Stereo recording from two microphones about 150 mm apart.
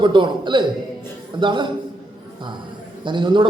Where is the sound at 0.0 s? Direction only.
30° right (ahead or behind).